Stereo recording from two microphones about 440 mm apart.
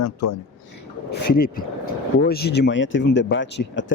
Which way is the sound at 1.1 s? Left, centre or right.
Left.